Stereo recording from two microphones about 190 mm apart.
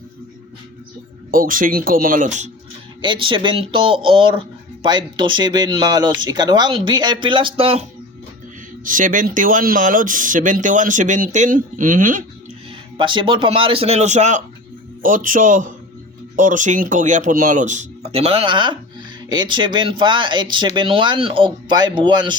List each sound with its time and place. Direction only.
1.3 s speech: 45° right (ahead or behind)
3.0 s speech: 25° right (ahead or behind)
8.8 s speech: 45° right (ahead or behind)
13.0 s speech: 25° right (ahead or behind)